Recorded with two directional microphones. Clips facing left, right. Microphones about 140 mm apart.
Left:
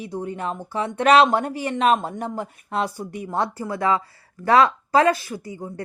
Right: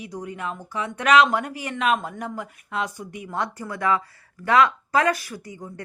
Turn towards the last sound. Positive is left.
turn(degrees=30)  # may be behind; listen again after turning